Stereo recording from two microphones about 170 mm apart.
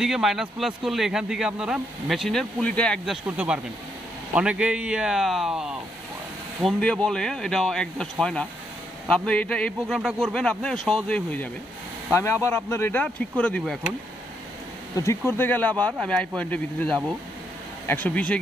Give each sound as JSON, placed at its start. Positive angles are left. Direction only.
{"t": 0.0, "sound": "speech", "side_deg": 0}
{"t": 3.3, "sound": "speech", "side_deg": -10}
{"t": 6.6, "sound": "speech", "side_deg": 5}
{"t": 15.0, "sound": "speech", "side_deg": 15}